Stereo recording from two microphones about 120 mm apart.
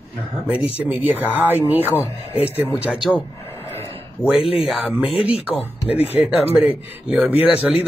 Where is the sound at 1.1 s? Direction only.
15° right (ahead or behind).